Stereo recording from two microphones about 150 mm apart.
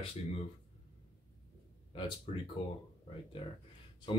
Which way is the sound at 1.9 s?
35° left (ahead or behind).